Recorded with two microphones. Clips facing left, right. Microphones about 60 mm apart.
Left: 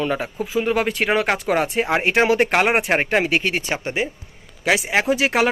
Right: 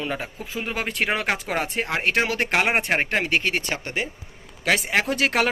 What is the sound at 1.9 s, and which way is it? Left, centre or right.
Speech, centre.